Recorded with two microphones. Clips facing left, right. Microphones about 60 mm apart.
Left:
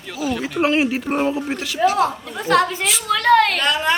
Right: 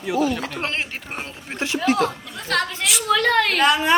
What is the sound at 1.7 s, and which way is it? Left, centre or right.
Speech, right.